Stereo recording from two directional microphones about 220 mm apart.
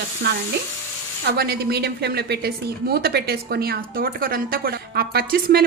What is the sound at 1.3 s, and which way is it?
A woman's voice, 45° right (ahead or behind).